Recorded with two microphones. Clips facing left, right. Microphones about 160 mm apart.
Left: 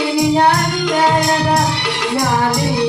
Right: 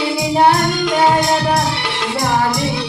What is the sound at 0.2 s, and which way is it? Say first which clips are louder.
Music: even; 25° right (ahead or behind).